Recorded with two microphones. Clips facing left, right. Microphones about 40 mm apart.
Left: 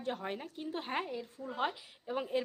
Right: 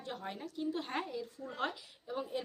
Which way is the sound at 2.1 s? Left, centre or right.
Left.